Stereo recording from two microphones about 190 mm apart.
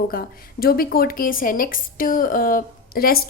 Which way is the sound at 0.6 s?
50° left (ahead or behind).